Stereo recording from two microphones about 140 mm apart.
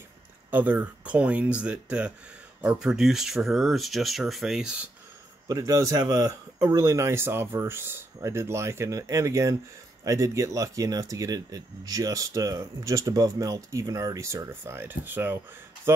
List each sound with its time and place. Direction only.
0.5 s speech: 10° right (ahead or behind)
5.5 s speech: 25° right (ahead or behind)